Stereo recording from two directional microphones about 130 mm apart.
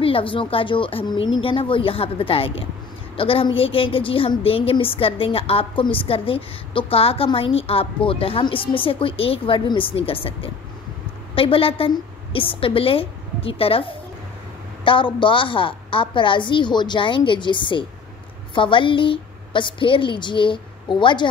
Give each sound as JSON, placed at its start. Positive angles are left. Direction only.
{"t": 0.0, "sound": "a woman's voice", "side_deg": 45}
{"t": 14.9, "sound": "a woman's voice", "side_deg": 40}